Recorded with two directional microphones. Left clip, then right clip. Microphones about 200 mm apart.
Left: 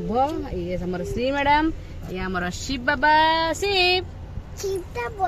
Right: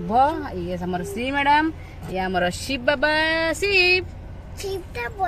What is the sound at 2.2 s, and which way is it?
Speech, 10° right (ahead or behind).